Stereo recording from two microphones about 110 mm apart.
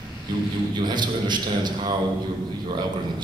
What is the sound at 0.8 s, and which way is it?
A man's voice, 40° right (ahead or behind).